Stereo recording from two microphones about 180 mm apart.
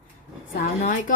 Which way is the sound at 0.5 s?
50° left (ahead or behind).